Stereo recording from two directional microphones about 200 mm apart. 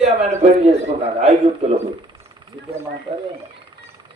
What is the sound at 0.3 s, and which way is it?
Speech, 30° right (ahead or behind).